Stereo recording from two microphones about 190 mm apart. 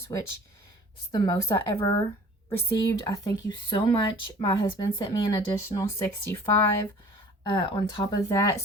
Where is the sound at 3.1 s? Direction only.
20° left (ahead or behind).